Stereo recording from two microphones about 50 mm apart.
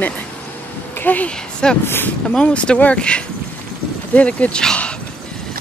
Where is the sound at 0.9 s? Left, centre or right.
Left.